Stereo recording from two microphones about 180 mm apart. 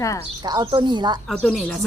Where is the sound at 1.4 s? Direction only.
Centre (ahead or behind).